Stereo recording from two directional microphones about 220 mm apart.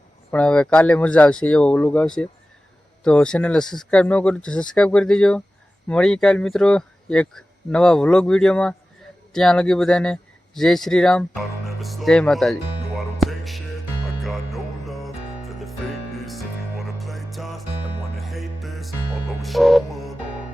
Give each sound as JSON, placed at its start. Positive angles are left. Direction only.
{"t": 0.3, "sound": "speech", "side_deg": 5}
{"t": 13.1, "sound": "music", "side_deg": 0}